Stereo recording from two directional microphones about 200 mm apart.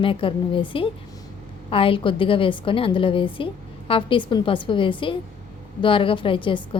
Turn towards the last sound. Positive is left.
turn(degrees=25)  # may be behind; listen again after turning